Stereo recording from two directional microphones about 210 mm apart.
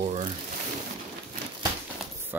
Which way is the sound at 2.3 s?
10° right (ahead or behind).